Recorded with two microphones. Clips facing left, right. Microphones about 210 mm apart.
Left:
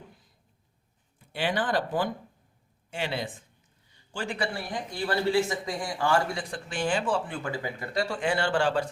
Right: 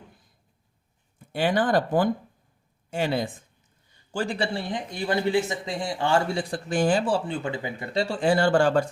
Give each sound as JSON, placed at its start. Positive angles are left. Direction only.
{"t": 1.3, "sound": "speech", "side_deg": -45}
{"t": 3.9, "sound": "a sound", "side_deg": -40}
{"t": 4.4, "sound": "speech", "side_deg": -25}
{"t": 6.7, "sound": "speech", "side_deg": -40}